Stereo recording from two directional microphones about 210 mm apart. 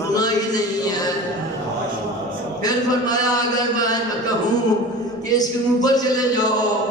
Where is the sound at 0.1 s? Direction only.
20° left (ahead or behind).